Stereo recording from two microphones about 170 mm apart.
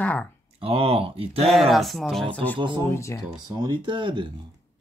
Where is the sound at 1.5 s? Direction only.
Centre (ahead or behind); by 3.2 s 15° left (ahead or behind).